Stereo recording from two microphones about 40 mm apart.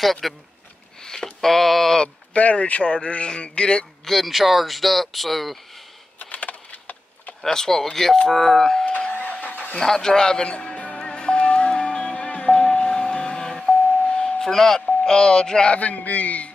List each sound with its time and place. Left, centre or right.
0.0 s speech: centre
2.3 s a man's voice: left
4.0 s speech: centre
6.1 s a sound: left
7.4 s speech: centre
9.1 s vehicle: left
9.8 s a man's voice: centre; by 11.1 s left
11.1 s music: left
14.0 s a sound: left
14.4 s speech: centre
15.7 s speech: left